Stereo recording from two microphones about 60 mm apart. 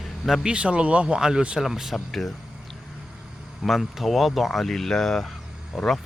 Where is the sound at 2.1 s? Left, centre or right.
Centre.